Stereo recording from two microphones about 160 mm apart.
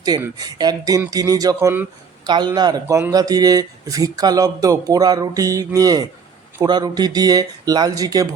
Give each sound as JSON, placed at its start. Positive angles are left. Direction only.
{"t": 0.3, "sound": "speech", "side_deg": -25}
{"t": 2.2, "sound": "speech", "side_deg": -25}